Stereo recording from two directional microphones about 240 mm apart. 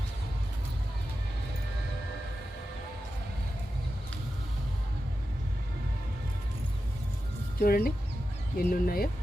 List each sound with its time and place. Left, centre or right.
7.6 s speech: left